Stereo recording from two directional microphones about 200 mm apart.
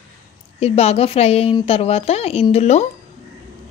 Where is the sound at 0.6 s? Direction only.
30° left (ahead or behind).